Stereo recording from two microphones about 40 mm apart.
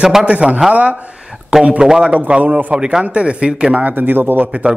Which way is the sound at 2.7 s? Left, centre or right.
Centre.